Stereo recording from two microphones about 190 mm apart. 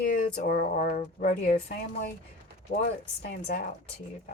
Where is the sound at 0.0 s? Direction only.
50° left (ahead or behind).